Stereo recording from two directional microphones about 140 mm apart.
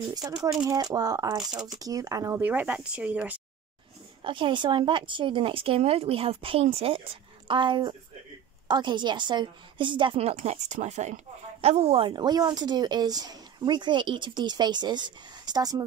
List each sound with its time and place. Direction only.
0.1 s speech: 25° right (ahead or behind)
1.5 s speech: 5° right (ahead or behind)
1.8 s speech: 25° right (ahead or behind)
4.2 s a woman's voice: 35° right (ahead or behind)